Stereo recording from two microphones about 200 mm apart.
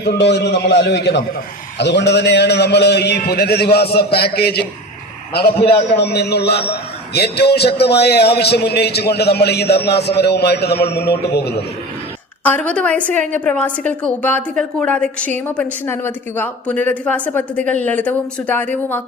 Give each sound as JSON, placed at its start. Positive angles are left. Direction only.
{"t": 0.0, "sound": "a man's voice", "side_deg": 55}
{"t": 12.5, "sound": "a woman's voice", "side_deg": 5}